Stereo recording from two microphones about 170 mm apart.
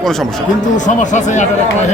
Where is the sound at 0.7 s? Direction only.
45° left (ahead or behind).